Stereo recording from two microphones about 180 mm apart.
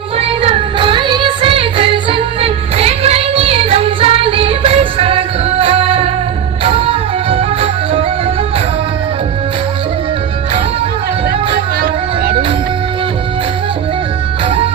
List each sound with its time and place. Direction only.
0.2 s music: 30° right (ahead or behind)
11.8 s music: 55° right (ahead or behind)